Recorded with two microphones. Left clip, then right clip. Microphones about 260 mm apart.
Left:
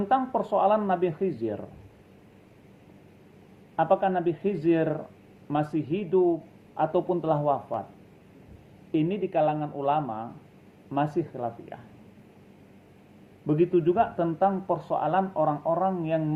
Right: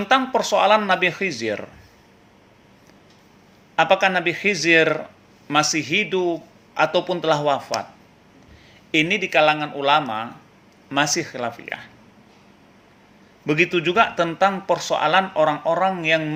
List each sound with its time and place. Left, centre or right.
0.1 s speech: right
3.8 s speech: right
8.9 s a man's voice: right
13.5 s speech: right